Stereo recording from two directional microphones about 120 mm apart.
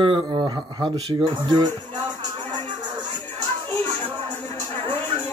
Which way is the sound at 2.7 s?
35° right (ahead or behind).